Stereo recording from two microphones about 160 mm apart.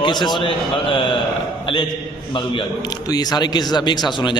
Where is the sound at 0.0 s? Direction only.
30° left (ahead or behind).